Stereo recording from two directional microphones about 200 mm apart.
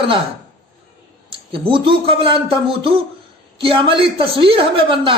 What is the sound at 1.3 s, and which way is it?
A man's voice, 25° right (ahead or behind).